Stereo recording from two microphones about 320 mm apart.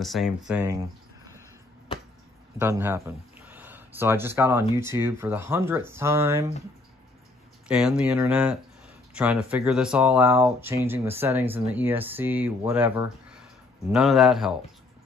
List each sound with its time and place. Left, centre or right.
0.0 s speech: centre
2.6 s speech: centre
7.6 s speech: centre